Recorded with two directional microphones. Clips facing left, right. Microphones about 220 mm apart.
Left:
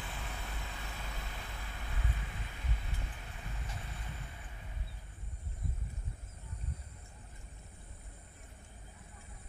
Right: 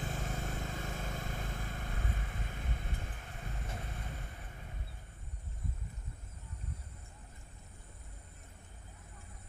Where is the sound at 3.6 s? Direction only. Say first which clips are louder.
Right 3 dB; 50° right (ahead or behind).